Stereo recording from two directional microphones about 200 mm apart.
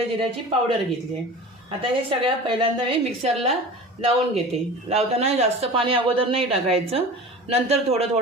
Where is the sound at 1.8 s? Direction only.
25° right (ahead or behind).